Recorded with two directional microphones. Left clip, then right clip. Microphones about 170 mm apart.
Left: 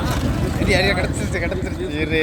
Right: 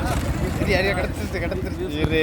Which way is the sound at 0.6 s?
Centre (ahead or behind).